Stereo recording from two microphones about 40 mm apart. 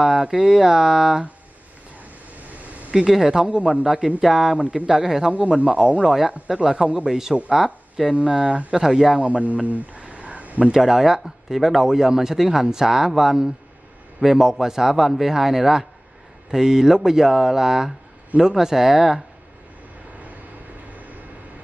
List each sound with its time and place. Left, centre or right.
0.0 s speech: centre
2.5 s a sound: right
2.9 s speech: centre
4.6 s speech: right
4.8 s speech: centre
5.7 s speech: right
6.0 s speech: centre
8.7 s speech: centre
9.2 s a sound: right
10.7 s speech: centre